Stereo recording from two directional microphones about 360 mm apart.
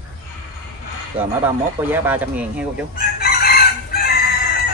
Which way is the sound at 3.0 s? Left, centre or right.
Left.